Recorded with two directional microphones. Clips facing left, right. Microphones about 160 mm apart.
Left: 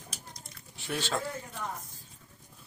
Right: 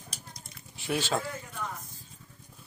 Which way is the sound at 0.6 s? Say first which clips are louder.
Right 4 dB; 10° right (ahead or behind).